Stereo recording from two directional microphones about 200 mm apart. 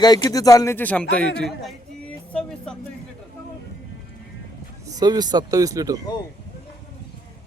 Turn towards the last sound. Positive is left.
turn(degrees=-15)  # may be behind; listen again after turning